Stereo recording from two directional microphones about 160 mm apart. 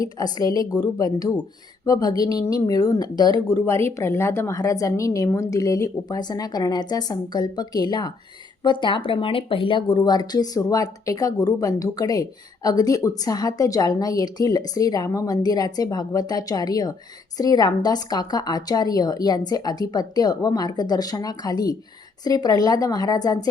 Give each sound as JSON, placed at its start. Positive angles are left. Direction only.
{"t": 0.0, "sound": "speech", "side_deg": 20}